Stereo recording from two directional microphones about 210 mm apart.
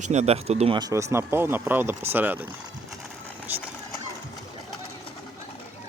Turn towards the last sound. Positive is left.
turn(degrees=-10)  # may be behind; listen again after turning